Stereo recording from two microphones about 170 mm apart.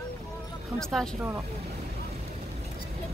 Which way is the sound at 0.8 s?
5° left (ahead or behind).